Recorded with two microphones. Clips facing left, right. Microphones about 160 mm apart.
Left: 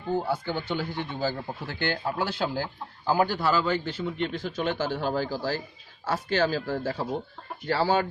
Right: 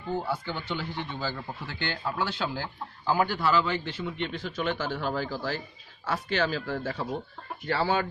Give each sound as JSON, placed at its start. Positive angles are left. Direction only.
{"t": 0.2, "sound": "speech", "side_deg": 40}